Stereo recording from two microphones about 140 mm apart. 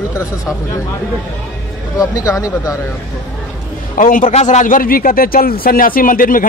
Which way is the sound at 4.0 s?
70° left (ahead or behind).